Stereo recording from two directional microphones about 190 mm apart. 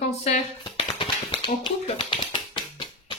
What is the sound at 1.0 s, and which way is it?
Tap, 25° left (ahead or behind).